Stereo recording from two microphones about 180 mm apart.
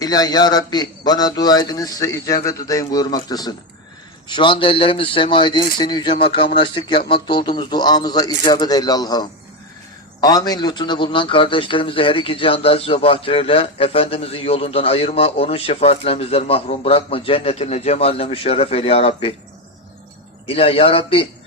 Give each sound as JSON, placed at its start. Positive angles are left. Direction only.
{"t": 0.0, "sound": "a man's voice", "side_deg": 20}
{"t": 20.5, "sound": "a man's voice", "side_deg": 30}